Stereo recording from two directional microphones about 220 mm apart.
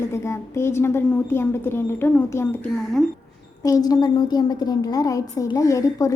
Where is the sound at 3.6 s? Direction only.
15° left (ahead or behind).